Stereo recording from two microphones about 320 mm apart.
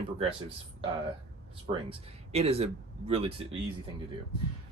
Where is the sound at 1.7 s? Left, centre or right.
Centre.